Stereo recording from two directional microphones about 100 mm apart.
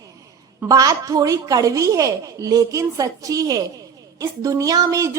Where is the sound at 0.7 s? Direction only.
35° right (ahead or behind).